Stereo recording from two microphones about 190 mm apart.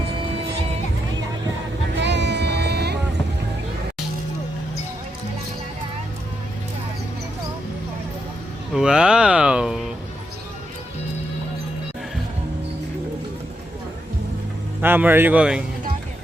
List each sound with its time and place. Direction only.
2.0 s music: 65° right (ahead or behind)
8.7 s a sound: 5° right (ahead or behind)
14.8 s speech: 10° right (ahead or behind)